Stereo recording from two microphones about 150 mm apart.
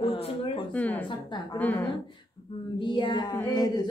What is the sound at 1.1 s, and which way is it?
Female singing, 30° left (ahead or behind).